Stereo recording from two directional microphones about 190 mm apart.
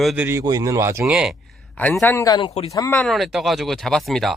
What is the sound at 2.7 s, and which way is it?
Speech, 15° left (ahead or behind).